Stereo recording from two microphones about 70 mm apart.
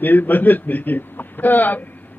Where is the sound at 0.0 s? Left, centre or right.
Left.